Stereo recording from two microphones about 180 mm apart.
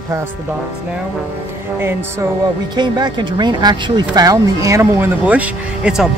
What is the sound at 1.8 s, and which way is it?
Speech, 15° right (ahead or behind).